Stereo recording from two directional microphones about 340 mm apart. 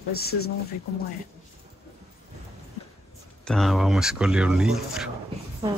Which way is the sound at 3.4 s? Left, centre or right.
Centre.